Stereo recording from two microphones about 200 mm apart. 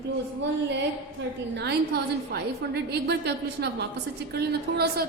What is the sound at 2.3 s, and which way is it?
A woman's voice, 55° right (ahead or behind).